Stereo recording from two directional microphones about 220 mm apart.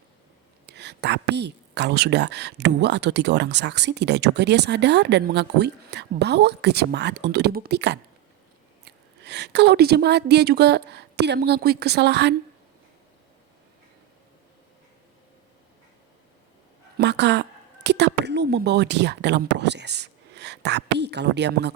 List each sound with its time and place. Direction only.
0.7 s a woman's voice: 50° right (ahead or behind)
17.0 s a woman's voice: 50° right (ahead or behind)